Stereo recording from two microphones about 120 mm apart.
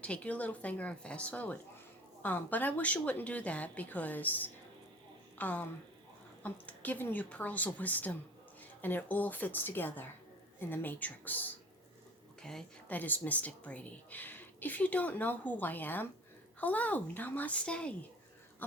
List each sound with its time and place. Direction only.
0.0 s a woman's voice: 10° left (ahead or behind)